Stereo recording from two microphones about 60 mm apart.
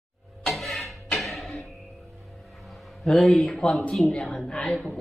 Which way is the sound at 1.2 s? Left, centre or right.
Centre.